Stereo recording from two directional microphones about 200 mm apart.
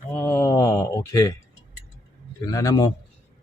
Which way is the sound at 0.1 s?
10° left (ahead or behind).